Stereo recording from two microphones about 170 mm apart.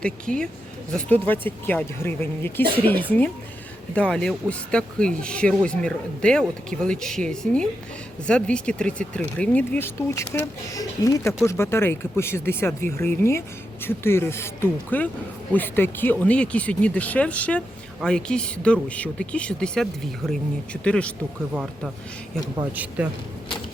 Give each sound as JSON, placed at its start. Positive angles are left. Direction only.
{"t": 0.0, "sound": "speech", "side_deg": 5}
{"t": 22.7, "sound": "speech", "side_deg": -10}